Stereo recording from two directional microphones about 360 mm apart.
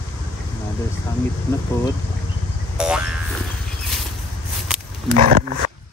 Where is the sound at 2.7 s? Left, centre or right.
Centre.